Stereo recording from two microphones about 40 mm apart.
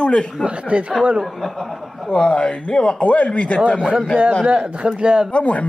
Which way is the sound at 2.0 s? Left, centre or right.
Centre.